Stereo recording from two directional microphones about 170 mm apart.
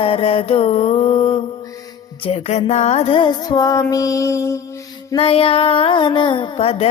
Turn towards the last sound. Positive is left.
turn(degrees=35)  # may be behind; listen again after turning